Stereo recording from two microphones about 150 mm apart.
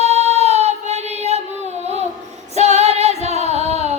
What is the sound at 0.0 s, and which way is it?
Music, 45° right (ahead or behind).